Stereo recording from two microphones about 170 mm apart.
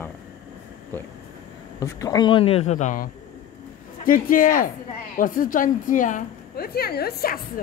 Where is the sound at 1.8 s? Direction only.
20° left (ahead or behind); by 7.4 s 65° left (ahead or behind).